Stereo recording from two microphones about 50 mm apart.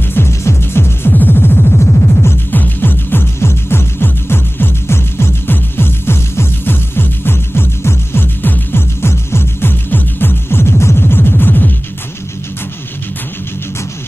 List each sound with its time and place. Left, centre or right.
0.3 s music: left
1.1 s music: left
2.5 s music: left
3.3 s music: left